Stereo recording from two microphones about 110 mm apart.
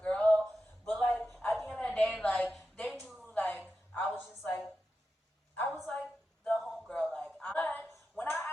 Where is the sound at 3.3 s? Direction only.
15° left (ahead or behind).